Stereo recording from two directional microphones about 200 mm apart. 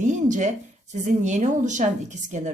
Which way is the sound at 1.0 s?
35° right (ahead or behind).